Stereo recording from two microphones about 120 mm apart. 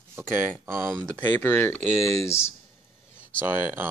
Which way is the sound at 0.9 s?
15° left (ahead or behind).